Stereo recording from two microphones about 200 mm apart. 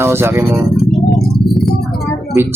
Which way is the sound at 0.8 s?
Centre (ahead or behind).